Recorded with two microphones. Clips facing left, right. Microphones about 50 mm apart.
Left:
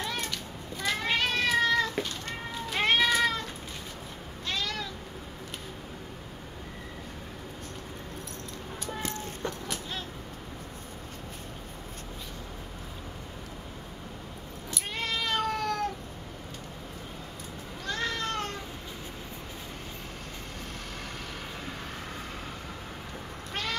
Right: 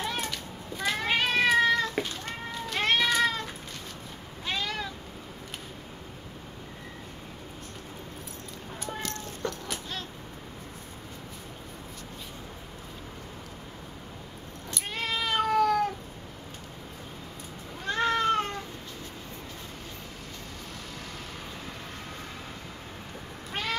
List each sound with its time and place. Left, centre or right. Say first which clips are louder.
0.0 s cat: right 1 dB; centre
2.7 s cat: left 1 dB; centre
4.5 s cat: right 1 dB; centre
9.0 s cat: even; centre
14.7 s cat: right 1 dB; centre
17.8 s cat: right 7 dB; right
23.5 s duck: right 2 dB; centre